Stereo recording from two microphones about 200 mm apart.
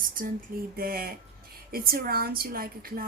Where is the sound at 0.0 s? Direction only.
45° right (ahead or behind).